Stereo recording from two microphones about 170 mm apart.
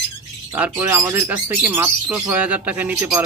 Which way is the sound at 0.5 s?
10° right (ahead or behind).